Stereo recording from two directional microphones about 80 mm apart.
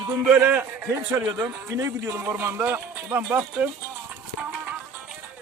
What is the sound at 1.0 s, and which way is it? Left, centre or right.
A man's voice, right.